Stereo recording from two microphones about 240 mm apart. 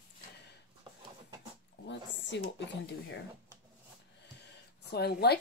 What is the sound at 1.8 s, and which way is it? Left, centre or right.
Speech, left.